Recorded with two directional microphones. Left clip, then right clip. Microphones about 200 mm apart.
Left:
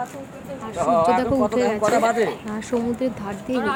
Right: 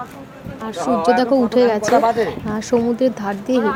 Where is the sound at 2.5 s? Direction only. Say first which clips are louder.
Right 7 dB; 10° right (ahead or behind).